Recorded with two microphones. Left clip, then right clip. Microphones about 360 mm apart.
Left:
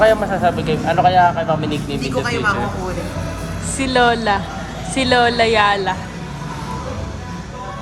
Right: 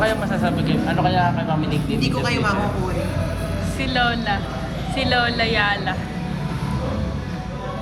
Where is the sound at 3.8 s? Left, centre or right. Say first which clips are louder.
Left 7 dB; centre.